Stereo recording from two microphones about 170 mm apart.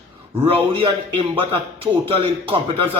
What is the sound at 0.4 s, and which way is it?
A man's voice, 30° right (ahead or behind).